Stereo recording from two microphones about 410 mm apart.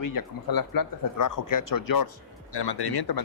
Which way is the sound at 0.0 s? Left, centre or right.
Left.